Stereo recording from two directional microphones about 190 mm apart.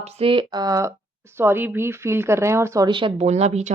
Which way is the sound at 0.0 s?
30° right (ahead or behind).